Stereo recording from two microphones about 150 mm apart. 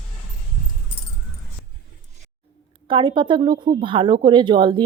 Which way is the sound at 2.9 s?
30° right (ahead or behind).